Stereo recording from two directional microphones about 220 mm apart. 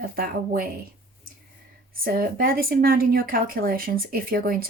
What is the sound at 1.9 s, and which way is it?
A woman's voice, 40° right (ahead or behind).